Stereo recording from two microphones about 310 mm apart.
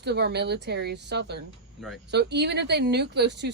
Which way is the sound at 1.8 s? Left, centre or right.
Centre.